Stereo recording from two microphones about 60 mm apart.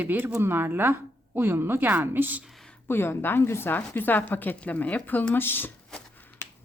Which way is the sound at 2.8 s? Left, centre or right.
Left.